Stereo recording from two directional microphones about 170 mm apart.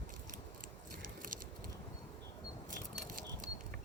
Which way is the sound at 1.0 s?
55° right (ahead or behind).